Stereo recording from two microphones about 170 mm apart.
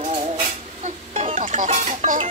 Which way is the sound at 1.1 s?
45° right (ahead or behind).